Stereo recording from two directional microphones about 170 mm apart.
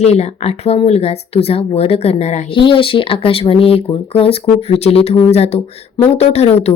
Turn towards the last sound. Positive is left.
turn(degrees=40)  # may be behind; listen again after turning